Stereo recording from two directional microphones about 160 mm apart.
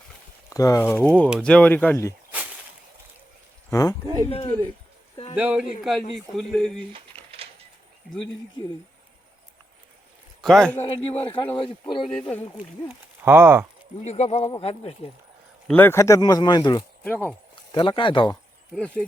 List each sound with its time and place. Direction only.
0.5 s speech: 20° left (ahead or behind)
0.9 s speech: 10° left (ahead or behind)
3.7 s speech: 20° left (ahead or behind)
4.0 s speech: 20° right (ahead or behind)
4.3 s speech: 40° left (ahead or behind)
5.4 s speech: 5° right (ahead or behind)
6.9 s a sound: 35° right (ahead or behind)
10.4 s speech: 5° left (ahead or behind)
10.8 s speech: 35° left (ahead or behind)
12.0 s speech: centre (ahead or behind)
13.2 s speech: 15° right (ahead or behind)
14.0 s speech: 45° left (ahead or behind)
15.6 s speech: 10° left (ahead or behind); by 18.3 s 30° left (ahead or behind)